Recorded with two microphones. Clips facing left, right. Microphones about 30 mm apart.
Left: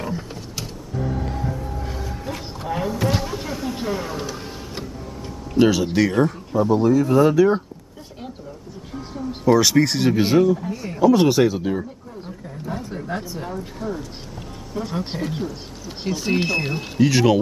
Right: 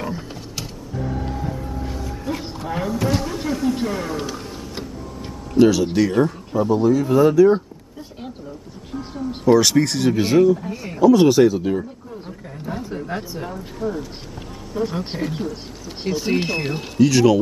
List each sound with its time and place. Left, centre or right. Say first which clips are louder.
0.0 s a sound: even; centre
5.5 s speech: right 2 dB; centre
9.1 s speech: right 2 dB; centre
9.8 s speech: even; centre
10.4 s speech: right 3 dB; centre
10.7 s speech: left 1 dB; centre
11.0 s speech: right 3 dB; centre
12.6 s speech: right 1 dB; centre
16.9 s speech: right 2 dB; centre